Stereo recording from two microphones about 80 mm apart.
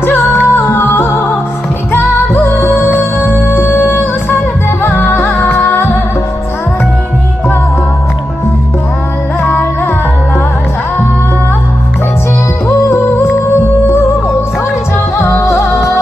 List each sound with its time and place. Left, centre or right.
0.0 s music: left
4.8 s music: left
9.4 s music: left
12.6 s music: left
15.1 s music: left